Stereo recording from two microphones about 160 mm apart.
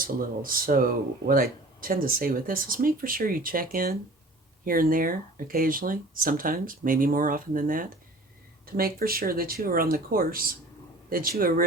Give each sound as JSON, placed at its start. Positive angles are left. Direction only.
{"t": 0.0, "sound": "speech", "side_deg": -60}